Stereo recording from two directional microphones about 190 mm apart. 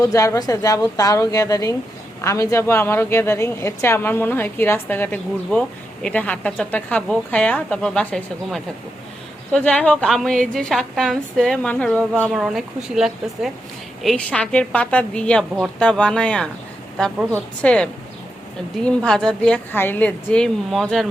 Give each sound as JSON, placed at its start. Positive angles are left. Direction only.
{"t": 0.0, "sound": "a woman's voice", "side_deg": 15}
{"t": 12.3, "sound": "a woman's voice", "side_deg": -5}